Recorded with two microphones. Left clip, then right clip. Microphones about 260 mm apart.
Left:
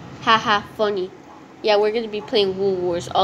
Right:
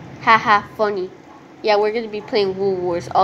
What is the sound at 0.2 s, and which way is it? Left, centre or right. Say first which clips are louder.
Speech: right 4 dB; centre.